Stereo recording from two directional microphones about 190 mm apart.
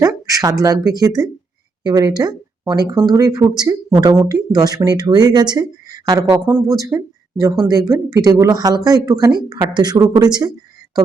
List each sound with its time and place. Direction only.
0.0 s speech: 20° right (ahead or behind)